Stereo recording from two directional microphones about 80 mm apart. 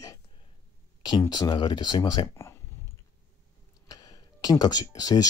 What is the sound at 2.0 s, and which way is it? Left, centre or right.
Speech, left.